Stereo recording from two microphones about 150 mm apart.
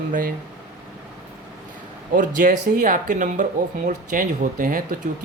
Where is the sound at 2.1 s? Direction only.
60° right (ahead or behind).